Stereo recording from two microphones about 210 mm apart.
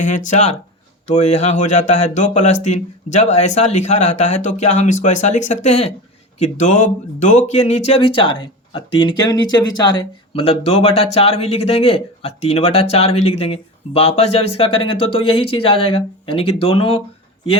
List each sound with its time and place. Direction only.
0.0 s speech: 35° left (ahead or behind)